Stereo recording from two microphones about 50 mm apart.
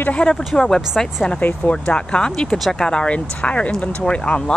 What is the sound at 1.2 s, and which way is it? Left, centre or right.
Speech, left.